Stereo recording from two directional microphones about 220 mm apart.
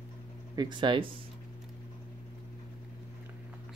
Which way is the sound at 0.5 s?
20° right (ahead or behind).